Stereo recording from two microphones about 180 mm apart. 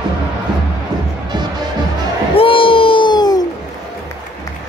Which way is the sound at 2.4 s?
30° left (ahead or behind).